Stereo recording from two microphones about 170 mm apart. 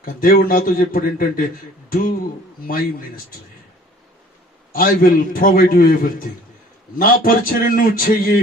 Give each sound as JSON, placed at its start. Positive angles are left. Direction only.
{"t": 0.0, "sound": "a man's voice", "side_deg": 55}
{"t": 4.7, "sound": "a man's voice", "side_deg": 55}